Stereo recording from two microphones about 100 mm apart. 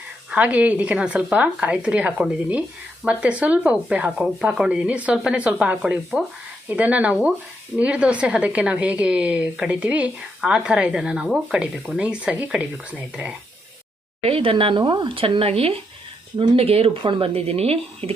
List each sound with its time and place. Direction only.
0.3 s speech: 15° right (ahead or behind)
14.2 s speech: 70° right (ahead or behind)